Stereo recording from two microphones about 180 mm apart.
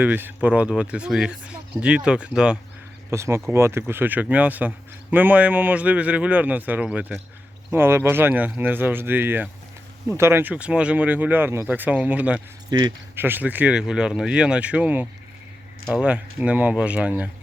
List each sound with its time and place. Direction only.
0.0 s speech: 10° right (ahead or behind)
12.7 s speech: 25° right (ahead or behind)
13.1 s speech: 10° right (ahead or behind)